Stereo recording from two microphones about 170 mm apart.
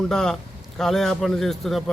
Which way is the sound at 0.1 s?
5° left (ahead or behind).